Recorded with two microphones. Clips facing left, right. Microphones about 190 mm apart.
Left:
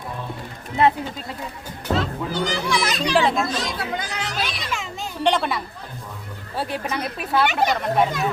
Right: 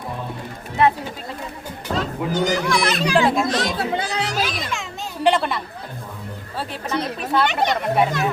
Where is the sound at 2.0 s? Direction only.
45° right (ahead or behind).